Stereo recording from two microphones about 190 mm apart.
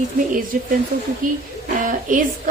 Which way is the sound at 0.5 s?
45° right (ahead or behind).